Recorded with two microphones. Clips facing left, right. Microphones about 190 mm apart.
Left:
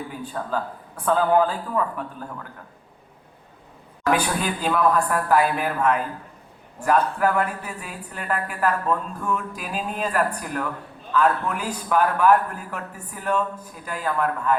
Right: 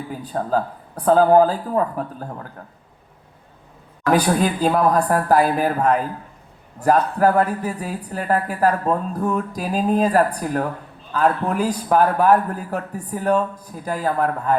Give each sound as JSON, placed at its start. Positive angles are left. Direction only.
{"t": 0.1, "sound": "speech", "side_deg": -40}
{"t": 4.1, "sound": "speech", "side_deg": -40}